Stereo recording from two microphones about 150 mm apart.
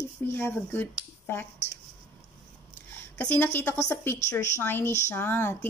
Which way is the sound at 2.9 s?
10° left (ahead or behind).